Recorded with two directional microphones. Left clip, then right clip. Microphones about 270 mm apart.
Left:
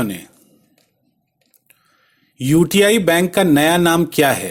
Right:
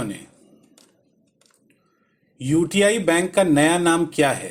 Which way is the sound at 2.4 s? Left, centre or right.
Left.